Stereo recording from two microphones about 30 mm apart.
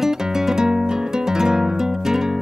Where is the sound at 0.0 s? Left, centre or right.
Centre.